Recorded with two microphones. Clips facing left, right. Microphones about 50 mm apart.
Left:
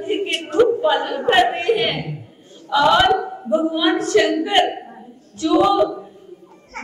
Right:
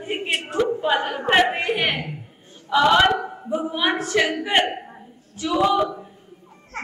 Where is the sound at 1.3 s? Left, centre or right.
Centre.